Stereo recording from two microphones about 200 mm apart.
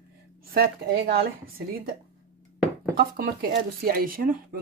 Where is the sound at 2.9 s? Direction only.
50° right (ahead or behind).